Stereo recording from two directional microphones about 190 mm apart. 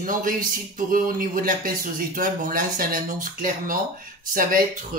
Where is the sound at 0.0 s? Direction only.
45° right (ahead or behind).